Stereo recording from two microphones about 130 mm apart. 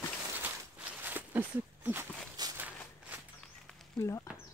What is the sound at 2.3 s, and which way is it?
Walk, 30° right (ahead or behind).